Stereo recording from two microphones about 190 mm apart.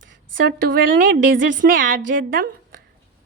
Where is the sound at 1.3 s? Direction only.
75° right (ahead or behind).